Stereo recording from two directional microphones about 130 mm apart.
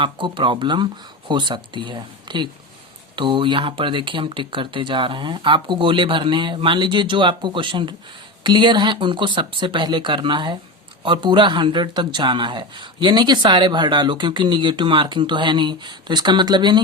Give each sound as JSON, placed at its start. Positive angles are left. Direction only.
{"t": 0.0, "sound": "speech", "side_deg": -40}